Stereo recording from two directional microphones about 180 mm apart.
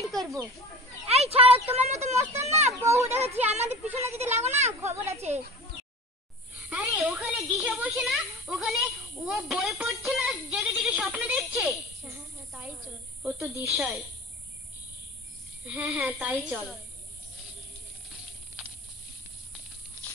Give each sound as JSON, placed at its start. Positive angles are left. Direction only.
{"t": 0.0, "sound": "bird", "side_deg": 0}
{"t": 1.0, "sound": "speech", "side_deg": -35}
{"t": 2.8, "sound": "speech", "side_deg": -15}
{"t": 3.1, "sound": "speech", "side_deg": -35}
{"t": 4.9, "sound": "speech", "side_deg": -15}
{"t": 6.7, "sound": "a child's voice", "side_deg": -5}
{"t": 15.6, "sound": "speech", "side_deg": -10}